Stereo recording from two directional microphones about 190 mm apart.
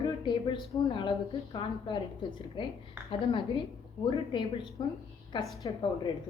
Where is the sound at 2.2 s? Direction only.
25° left (ahead or behind).